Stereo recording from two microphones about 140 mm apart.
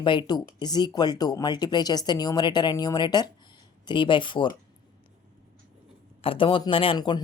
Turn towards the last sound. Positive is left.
turn(degrees=35)  # may be behind; listen again after turning